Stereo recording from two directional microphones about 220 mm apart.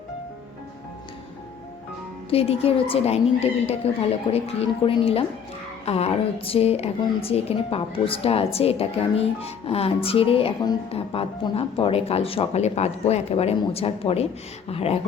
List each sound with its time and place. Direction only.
2.3 s speech: 25° left (ahead or behind)